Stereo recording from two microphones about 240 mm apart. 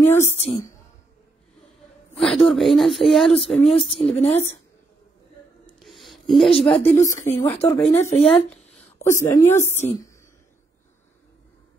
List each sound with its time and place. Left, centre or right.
0.0 s a woman's voice: centre
0.3 s speech: left
2.1 s speech: centre
4.2 s speech: left
5.8 s a sound: centre
6.8 s a woman's voice: centre
8.1 s speech: left
9.0 s a woman's voice: centre